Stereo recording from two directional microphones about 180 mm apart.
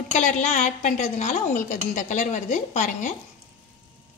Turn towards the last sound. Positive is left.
turn(degrees=45)  # may be behind; listen again after turning